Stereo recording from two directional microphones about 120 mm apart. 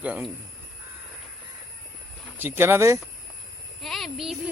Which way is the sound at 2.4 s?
20° right (ahead or behind).